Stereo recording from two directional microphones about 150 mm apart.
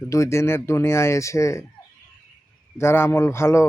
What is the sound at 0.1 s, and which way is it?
A man's voice, 20° left (ahead or behind).